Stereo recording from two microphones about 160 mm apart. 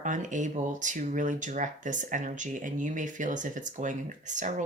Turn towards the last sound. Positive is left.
turn(degrees=-50)  # may be behind; listen again after turning